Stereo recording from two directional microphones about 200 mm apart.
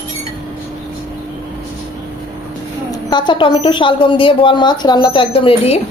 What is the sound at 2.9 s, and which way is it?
A woman's voice, 20° left (ahead or behind).